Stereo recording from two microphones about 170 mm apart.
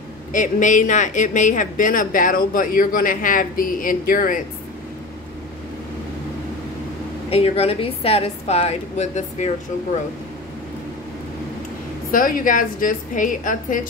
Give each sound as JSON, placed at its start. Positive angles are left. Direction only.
{"t": 0.3, "sound": "a woman's voice", "side_deg": 50}
{"t": 7.2, "sound": "a woman's voice", "side_deg": 35}
{"t": 12.1, "sound": "a woman's voice", "side_deg": 55}